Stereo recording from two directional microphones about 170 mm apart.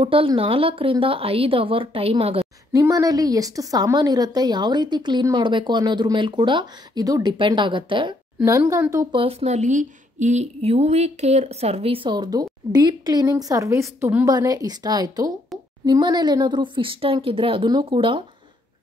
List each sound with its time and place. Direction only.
0.0 s a woman's voice: 30° right (ahead or behind)
2.7 s a woman's voice: 20° right (ahead or behind)
8.5 s a woman's voice: 20° right (ahead or behind)
9.2 s a woman's voice: 35° right (ahead or behind)